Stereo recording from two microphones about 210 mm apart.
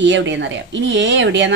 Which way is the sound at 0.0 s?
60° right (ahead or behind).